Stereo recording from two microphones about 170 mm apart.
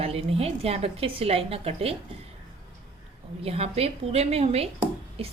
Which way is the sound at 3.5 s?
35° right (ahead or behind).